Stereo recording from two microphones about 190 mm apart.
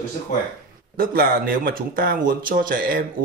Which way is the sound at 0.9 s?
50° right (ahead or behind).